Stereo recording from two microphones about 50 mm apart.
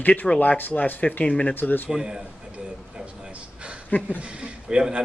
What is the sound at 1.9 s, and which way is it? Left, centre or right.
Speech, centre.